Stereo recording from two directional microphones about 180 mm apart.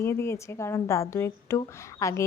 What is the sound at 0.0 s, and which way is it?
A woman's voice, 15° left (ahead or behind).